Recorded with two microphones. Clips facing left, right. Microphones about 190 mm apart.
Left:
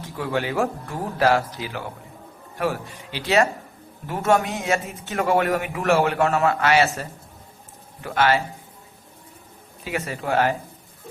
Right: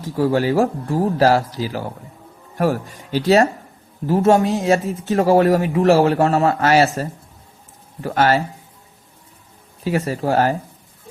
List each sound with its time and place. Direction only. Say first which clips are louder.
0.2 s speech: right 7 dB; 35° right (ahead or behind)
8.0 s speech: right 3 dB; 40° right (ahead or behind)
9.8 s speech: right 7 dB; 40° right (ahead or behind)